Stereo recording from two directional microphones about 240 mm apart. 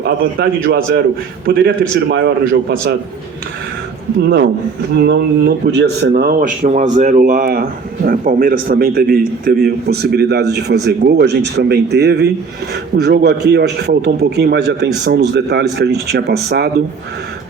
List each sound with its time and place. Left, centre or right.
0.0 s speech: right
4.2 s a man's voice: right